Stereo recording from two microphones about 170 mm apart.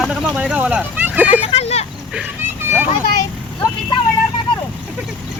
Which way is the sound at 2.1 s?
15° right (ahead or behind).